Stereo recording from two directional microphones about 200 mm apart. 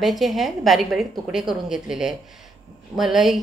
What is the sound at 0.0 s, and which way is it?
A woman's voice, centre (ahead or behind).